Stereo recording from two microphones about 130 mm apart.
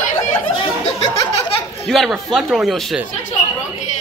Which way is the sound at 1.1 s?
25° left (ahead or behind).